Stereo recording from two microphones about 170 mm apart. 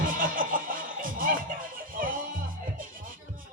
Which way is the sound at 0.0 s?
55° right (ahead or behind).